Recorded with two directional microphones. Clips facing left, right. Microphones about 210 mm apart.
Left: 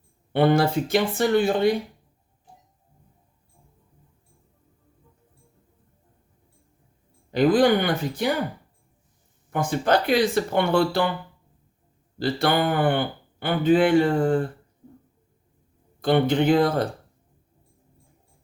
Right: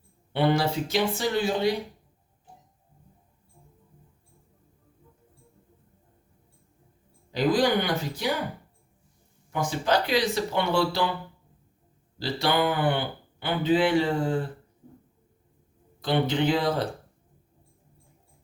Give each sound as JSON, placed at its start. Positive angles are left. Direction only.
{"t": 0.3, "sound": "speech", "side_deg": 50}
{"t": 7.3, "sound": "speech", "side_deg": 55}
{"t": 9.5, "sound": "speech", "side_deg": 55}
{"t": 12.2, "sound": "speech", "side_deg": 50}
{"t": 16.0, "sound": "speech", "side_deg": 50}